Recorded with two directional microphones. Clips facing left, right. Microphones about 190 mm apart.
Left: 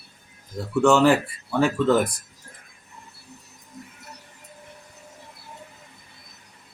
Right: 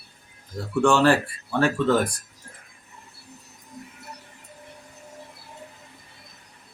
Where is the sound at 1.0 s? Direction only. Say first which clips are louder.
Left 1 dB; 10° left (ahead or behind).